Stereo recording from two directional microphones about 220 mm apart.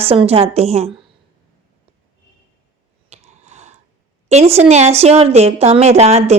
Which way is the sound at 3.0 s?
30° right (ahead or behind).